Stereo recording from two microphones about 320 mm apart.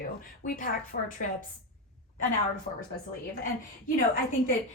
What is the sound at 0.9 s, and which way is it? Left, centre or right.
Speech, left.